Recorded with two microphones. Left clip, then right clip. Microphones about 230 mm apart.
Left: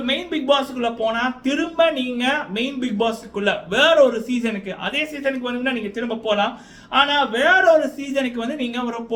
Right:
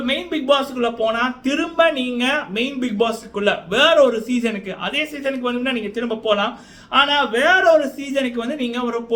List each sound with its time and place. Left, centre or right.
0.0 s a man's voice: centre